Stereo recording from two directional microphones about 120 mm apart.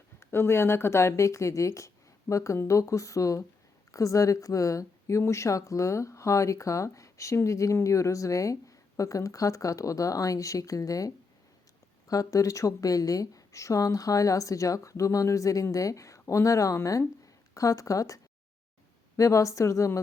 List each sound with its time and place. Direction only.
0.2 s a woman's voice: 20° left (ahead or behind)